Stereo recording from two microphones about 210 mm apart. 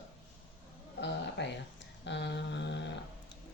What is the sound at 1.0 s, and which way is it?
Speech, 55° left (ahead or behind).